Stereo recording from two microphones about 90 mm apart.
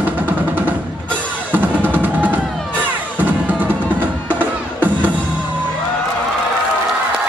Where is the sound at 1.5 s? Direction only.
20° right (ahead or behind).